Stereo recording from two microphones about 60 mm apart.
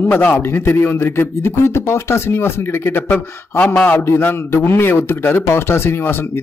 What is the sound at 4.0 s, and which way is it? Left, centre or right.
A man's voice, left.